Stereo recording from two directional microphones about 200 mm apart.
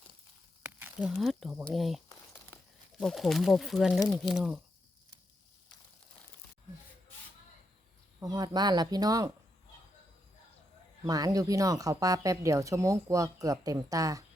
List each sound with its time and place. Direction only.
0.6 s speech: 10° right (ahead or behind)
2.0 s crumpling: 15° left (ahead or behind)
3.0 s speech: centre (ahead or behind)
8.2 s speech: 20° right (ahead or behind)
11.0 s speech: 20° right (ahead or behind)